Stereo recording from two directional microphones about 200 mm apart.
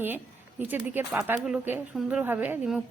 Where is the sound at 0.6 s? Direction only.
10° right (ahead or behind).